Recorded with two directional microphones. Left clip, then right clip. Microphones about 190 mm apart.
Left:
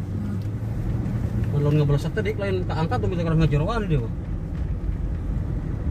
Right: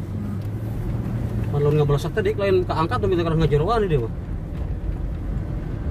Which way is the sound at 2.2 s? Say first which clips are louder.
Right 8 dB; 45° right (ahead or behind).